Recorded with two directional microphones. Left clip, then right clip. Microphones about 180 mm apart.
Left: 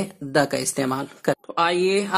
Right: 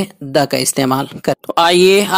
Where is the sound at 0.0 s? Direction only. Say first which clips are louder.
Right 6 dB; 35° right (ahead or behind).